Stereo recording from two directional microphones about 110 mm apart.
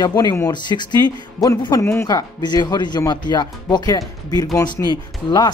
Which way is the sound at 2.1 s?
40° left (ahead or behind).